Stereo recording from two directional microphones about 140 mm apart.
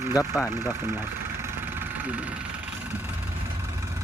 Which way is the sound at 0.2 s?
15° left (ahead or behind).